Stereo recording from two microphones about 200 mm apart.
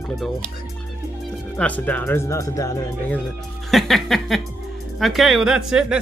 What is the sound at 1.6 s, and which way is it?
Speech, 10° left (ahead or behind).